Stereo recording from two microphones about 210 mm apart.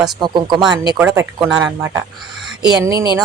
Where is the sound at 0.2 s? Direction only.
20° right (ahead or behind); by 1.9 s 5° right (ahead or behind).